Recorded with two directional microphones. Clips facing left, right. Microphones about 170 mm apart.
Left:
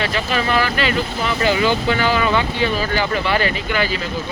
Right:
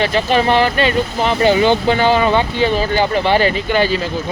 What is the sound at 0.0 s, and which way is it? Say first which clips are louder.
Speech: right 6 dB; 30° right (ahead or behind).